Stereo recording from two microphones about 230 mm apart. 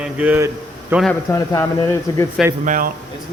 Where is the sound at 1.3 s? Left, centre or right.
Centre.